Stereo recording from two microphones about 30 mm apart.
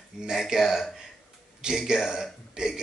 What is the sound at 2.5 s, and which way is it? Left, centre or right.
Speech, right.